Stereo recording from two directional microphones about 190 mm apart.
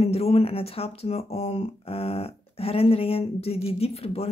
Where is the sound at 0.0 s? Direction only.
30° left (ahead or behind).